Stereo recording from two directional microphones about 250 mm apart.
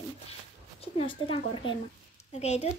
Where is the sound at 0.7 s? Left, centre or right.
Left.